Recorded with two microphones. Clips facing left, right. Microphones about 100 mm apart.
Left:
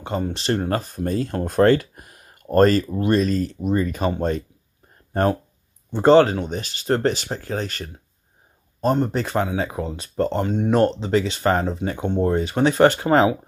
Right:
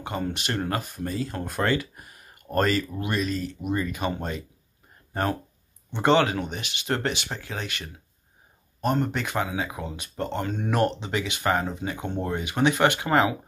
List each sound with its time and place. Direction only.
0.3 s speech: 30° left (ahead or behind)
1.0 s speech: 45° left (ahead or behind)
6.0 s speech: 35° left (ahead or behind)
12.0 s speech: 25° left (ahead or behind)